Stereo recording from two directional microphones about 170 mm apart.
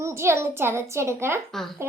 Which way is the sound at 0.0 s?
15° right (ahead or behind).